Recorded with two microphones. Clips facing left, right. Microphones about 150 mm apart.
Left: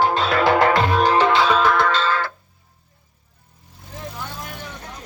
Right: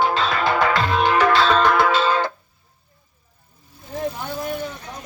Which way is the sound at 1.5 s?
Centre (ahead or behind).